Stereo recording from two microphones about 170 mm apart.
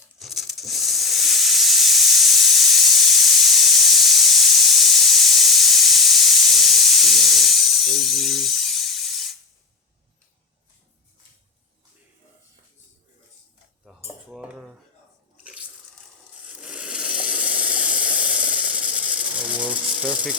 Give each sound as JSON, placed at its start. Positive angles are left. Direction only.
{"t": 0.2, "sound": "hiss", "side_deg": 0}
{"t": 14.3, "sound": "cutlery", "side_deg": 0}
{"t": 16.4, "sound": "a sound", "side_deg": -5}